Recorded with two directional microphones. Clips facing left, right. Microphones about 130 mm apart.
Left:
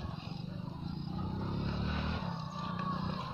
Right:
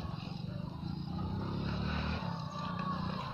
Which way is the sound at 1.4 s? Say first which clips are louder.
Left 1 dB; 5° left (ahead or behind).